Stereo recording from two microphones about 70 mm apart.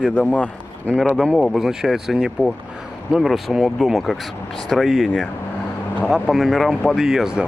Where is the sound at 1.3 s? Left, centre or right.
Centre.